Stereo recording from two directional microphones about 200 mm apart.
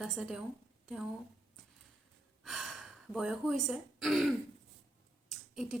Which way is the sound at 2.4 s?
Centre (ahead or behind).